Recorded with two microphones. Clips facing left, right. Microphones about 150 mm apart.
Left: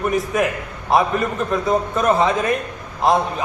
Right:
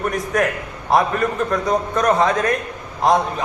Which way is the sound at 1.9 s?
5° left (ahead or behind).